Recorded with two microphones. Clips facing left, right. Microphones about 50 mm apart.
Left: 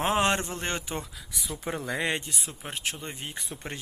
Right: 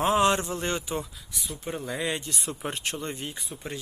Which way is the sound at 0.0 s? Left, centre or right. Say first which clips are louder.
Right 3 dB; left.